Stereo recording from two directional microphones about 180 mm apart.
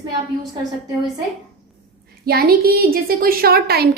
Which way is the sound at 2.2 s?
60° right (ahead or behind).